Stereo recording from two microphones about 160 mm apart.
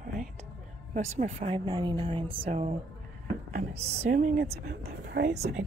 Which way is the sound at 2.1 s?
35° right (ahead or behind).